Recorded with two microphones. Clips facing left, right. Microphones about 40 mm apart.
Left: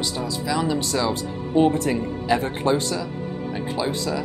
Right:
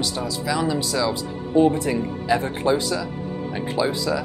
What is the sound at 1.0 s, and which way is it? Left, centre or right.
Speech, left.